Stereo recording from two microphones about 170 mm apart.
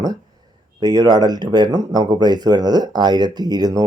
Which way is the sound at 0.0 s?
25° right (ahead or behind).